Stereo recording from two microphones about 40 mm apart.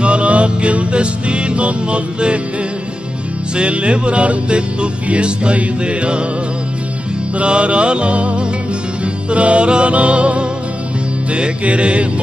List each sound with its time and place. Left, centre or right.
0.0 s music: right
3.5 s music: right
7.3 s music: right